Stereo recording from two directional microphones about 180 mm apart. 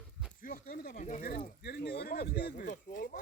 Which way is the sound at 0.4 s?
50° left (ahead or behind).